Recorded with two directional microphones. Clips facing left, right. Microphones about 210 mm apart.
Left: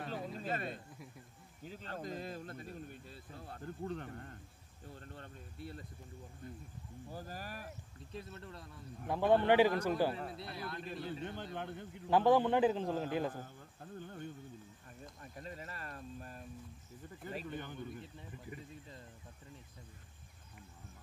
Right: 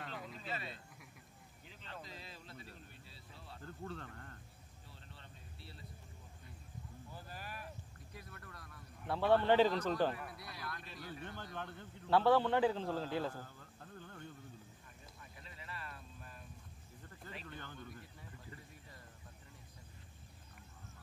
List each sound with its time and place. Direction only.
0.1 s a sound: 40° left (ahead or behind)
1.6 s speech: 45° left (ahead or behind)
3.6 s speech: 20° left (ahead or behind)
4.8 s speech: 50° left (ahead or behind)
8.1 s a man's voice: 25° left (ahead or behind)
10.1 s a man's voice: 25° left (ahead or behind)
15.1 s a sound: 45° left (ahead or behind)
17.5 s speech: 15° left (ahead or behind)